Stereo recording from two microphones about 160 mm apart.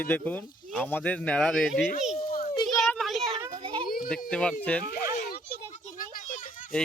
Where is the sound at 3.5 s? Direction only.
35° right (ahead or behind).